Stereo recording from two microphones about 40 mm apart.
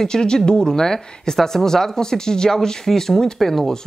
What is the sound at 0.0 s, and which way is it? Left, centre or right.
Speech, centre.